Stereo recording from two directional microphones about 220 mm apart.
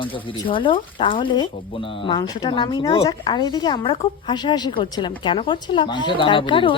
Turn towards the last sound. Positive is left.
turn(degrees=25)  # may be behind; listen again after turning